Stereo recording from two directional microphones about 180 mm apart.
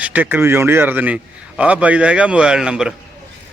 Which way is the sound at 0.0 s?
10° right (ahead or behind).